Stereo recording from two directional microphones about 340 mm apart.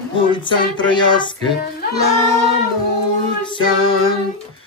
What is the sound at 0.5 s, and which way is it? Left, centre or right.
Speech, centre.